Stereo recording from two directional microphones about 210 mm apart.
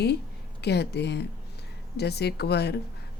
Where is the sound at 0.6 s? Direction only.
50° left (ahead or behind).